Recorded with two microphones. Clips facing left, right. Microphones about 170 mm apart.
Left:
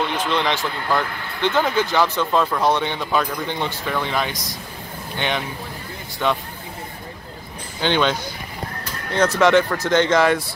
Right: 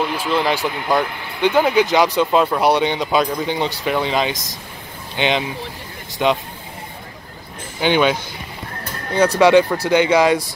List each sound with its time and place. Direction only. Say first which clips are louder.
0.0 s speech: right 2 dB; 5° right (ahead or behind)
7.8 s speech: right 3 dB; 10° right (ahead or behind)
9.4 s speech: right 4 dB; 15° right (ahead or behind)